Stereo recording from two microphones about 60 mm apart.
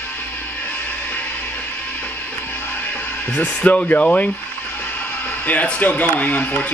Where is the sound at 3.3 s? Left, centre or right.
Left.